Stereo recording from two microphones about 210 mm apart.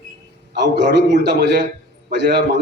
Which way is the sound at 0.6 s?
55° right (ahead or behind).